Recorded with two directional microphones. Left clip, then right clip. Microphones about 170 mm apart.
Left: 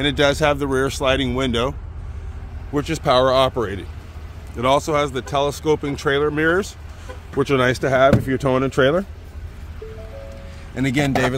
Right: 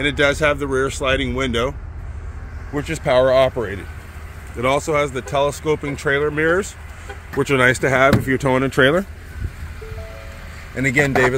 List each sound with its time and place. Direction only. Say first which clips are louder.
0.0 s speech: right 1 dB; 25° left (ahead or behind); by 3.8 s 10° left (ahead or behind)
4.6 s speech: even; centre (ahead or behind)
10.8 s speech: right 4 dB; centre (ahead or behind)